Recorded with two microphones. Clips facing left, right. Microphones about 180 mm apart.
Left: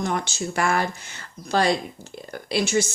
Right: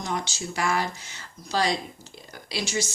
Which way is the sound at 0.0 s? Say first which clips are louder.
Left 5 dB; 55° left (ahead or behind).